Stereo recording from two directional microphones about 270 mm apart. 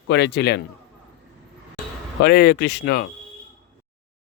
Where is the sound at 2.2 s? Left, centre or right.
Left.